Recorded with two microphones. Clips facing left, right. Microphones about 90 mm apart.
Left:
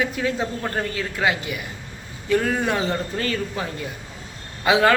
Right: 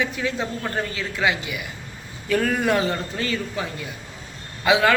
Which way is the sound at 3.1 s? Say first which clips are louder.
Left 1 dB; 40° left (ahead or behind).